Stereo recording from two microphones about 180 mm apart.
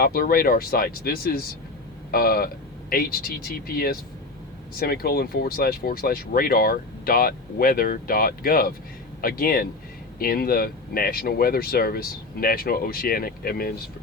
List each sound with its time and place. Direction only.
0.0 s speech: 55° left (ahead or behind)